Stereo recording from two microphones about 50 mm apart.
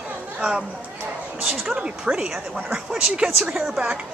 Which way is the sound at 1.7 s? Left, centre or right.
Centre.